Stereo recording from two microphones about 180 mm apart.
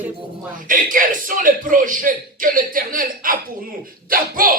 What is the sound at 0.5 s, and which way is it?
A man's voice, 50° right (ahead or behind).